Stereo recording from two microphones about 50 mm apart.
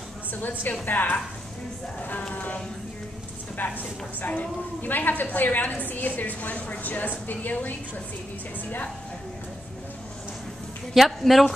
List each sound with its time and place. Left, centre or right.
0.3 s a woman's voice: left
10.9 s speech: centre